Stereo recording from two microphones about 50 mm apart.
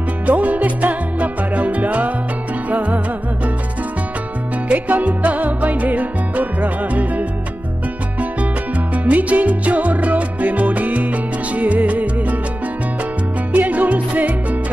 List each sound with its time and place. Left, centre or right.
0.3 s music: right
4.6 s music: right
8.9 s music: right
13.5 s music: right